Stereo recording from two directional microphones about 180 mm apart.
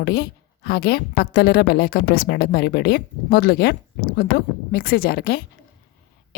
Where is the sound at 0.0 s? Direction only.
60° left (ahead or behind).